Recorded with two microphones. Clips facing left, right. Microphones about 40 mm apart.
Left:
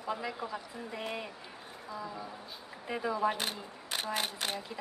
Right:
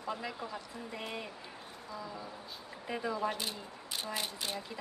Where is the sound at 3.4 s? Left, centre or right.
Left.